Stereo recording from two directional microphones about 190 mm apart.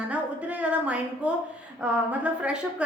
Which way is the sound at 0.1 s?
5° right (ahead or behind).